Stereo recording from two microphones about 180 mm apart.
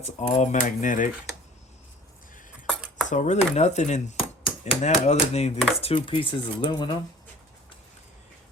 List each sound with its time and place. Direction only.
0.0 s speech: 40° left (ahead or behind)
2.6 s a sound: centre (ahead or behind)
3.1 s speech: 40° left (ahead or behind); by 7.0 s 25° left (ahead or behind)